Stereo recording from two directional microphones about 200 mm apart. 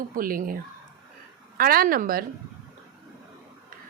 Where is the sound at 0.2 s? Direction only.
45° right (ahead or behind).